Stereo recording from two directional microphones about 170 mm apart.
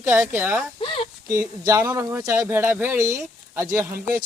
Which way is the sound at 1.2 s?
15° right (ahead or behind).